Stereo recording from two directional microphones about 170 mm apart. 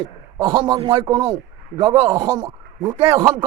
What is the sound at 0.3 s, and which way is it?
A man's voice, 20° right (ahead or behind).